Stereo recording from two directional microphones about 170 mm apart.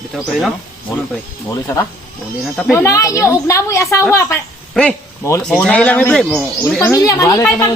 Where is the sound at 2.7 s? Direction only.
15° left (ahead or behind).